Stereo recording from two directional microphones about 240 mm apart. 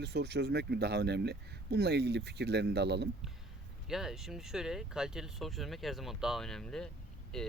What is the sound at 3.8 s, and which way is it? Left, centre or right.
Speech, centre.